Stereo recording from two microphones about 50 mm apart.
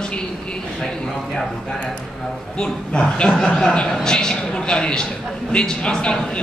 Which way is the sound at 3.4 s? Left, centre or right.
Centre.